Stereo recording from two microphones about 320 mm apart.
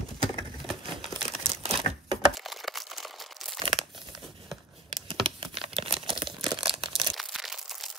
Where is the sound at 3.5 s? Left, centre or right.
Centre.